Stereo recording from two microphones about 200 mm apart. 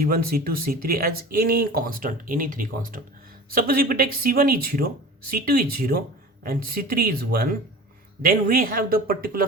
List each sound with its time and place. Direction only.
0.0 s speech: 45° right (ahead or behind)